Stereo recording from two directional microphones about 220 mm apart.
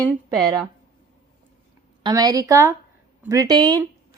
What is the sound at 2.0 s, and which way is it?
A woman's voice, 15° right (ahead or behind).